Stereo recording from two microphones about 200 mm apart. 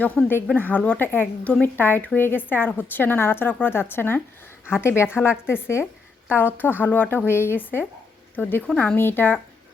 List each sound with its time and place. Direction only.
0.0 s a woman's voice: 10° left (ahead or behind)